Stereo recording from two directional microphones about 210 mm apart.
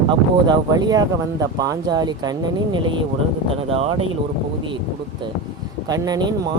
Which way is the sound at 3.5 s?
25° right (ahead or behind).